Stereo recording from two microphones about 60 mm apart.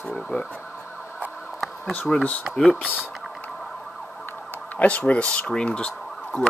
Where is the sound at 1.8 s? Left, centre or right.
Left.